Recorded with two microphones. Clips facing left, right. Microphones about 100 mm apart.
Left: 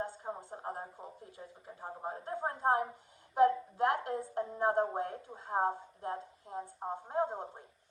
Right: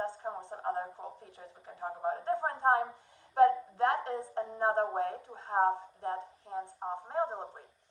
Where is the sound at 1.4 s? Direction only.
45° right (ahead or behind).